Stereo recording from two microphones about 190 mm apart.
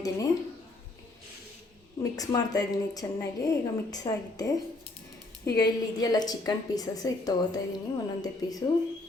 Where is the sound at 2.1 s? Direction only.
20° left (ahead or behind).